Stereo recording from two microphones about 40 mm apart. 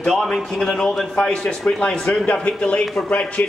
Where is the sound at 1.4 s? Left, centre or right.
Left.